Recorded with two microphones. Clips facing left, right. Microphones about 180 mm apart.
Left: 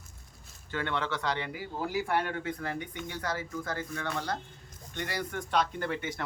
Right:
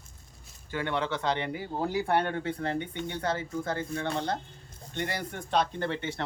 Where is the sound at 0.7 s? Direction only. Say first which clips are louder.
Right 2 dB; 15° right (ahead or behind).